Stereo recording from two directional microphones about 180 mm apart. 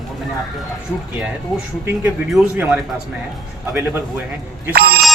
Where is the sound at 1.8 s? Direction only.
5° right (ahead or behind).